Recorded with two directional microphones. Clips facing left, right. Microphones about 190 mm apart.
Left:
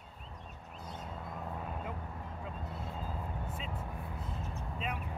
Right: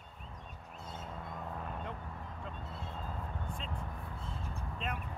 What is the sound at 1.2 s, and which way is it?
Vehicle, 5° left (ahead or behind).